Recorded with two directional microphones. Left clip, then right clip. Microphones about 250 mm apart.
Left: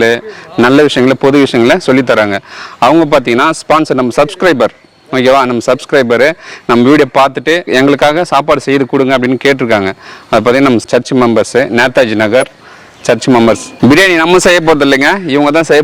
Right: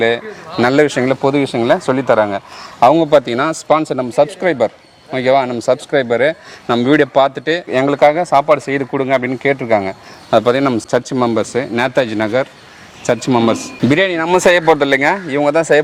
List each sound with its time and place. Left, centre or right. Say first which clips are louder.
0.6 s a man's voice: left 6 dB; left